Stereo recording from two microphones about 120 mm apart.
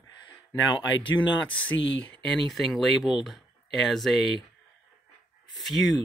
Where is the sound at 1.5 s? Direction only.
15° left (ahead or behind).